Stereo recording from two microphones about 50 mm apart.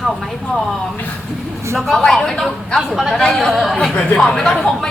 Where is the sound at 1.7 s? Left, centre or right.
Centre.